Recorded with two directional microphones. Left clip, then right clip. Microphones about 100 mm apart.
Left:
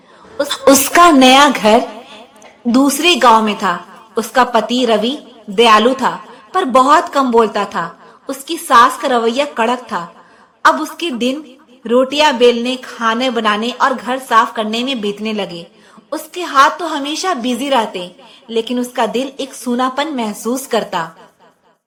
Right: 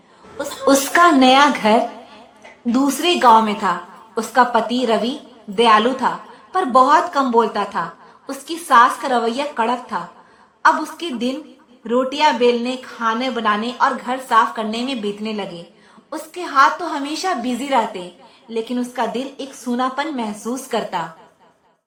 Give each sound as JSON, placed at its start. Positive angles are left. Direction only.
{"t": 0.3, "sound": "a woman's voice", "side_deg": 40}